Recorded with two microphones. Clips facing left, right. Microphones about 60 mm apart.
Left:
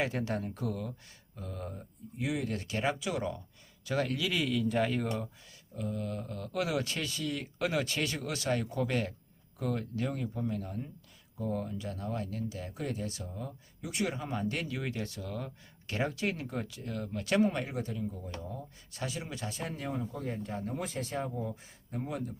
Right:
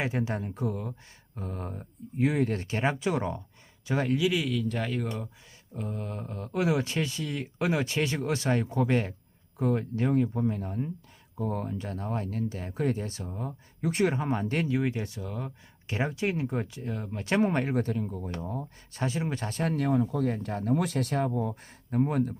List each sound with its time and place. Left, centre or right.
0.0 s speech: centre
1.4 s speech: right
4.3 s speech: centre
5.7 s speech: right
11.3 s speech: right
17.5 s speech: right
18.6 s speech: right
21.3 s speech: right